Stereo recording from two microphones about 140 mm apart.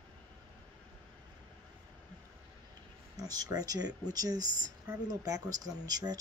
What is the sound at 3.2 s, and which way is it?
Speech, 25° right (ahead or behind).